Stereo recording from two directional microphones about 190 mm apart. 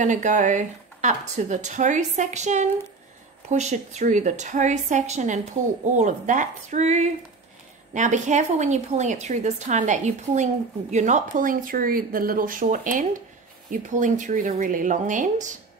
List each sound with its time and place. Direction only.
0.0 s a woman's voice: 40° right (ahead or behind)